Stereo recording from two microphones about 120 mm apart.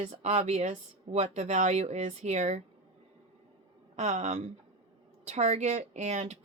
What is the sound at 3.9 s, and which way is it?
A woman's voice, 75° right (ahead or behind).